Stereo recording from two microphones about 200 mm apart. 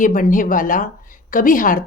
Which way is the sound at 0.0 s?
40° left (ahead or behind).